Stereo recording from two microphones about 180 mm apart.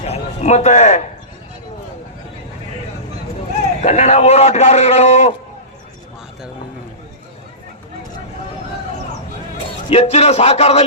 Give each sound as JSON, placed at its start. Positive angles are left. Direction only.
{"t": 0.0, "sound": "a man's voice", "side_deg": 35}
{"t": 3.8, "sound": "a man's voice", "side_deg": 40}
{"t": 9.9, "sound": "a man's voice", "side_deg": 35}